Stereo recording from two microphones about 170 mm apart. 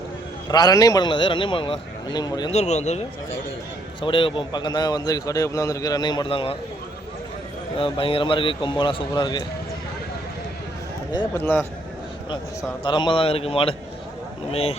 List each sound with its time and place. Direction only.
0.4 s a man's voice: 25° left (ahead or behind)
2.5 s a man's voice: 40° left (ahead or behind)
4.0 s a man's voice: 30° left (ahead or behind)
7.8 s a man's voice: 30° left (ahead or behind)
11.3 s speech: 10° left (ahead or behind)
12.8 s a man's voice: 25° left (ahead or behind)